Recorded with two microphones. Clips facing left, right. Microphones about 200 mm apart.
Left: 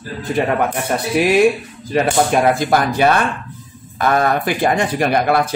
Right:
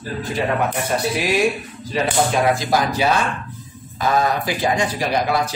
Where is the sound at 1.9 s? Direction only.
55° left (ahead or behind).